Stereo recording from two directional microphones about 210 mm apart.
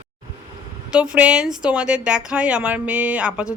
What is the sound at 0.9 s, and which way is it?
Speech, 5° right (ahead or behind).